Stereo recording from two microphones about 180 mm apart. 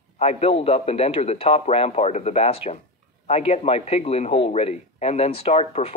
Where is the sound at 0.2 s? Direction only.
35° left (ahead or behind).